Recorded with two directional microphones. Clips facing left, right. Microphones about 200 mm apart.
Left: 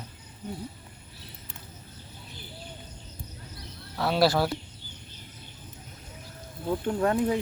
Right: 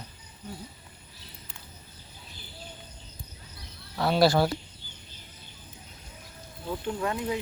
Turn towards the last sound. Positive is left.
turn(degrees=45)  # may be behind; listen again after turning